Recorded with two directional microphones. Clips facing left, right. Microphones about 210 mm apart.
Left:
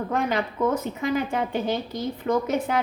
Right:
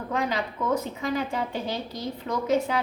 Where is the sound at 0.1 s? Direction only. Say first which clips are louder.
Even; 55° left (ahead or behind).